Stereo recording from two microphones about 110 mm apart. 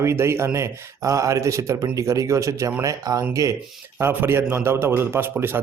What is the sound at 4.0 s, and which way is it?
Speech, 20° right (ahead or behind).